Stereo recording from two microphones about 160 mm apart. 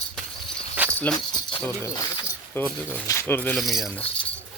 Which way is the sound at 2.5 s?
15° left (ahead or behind).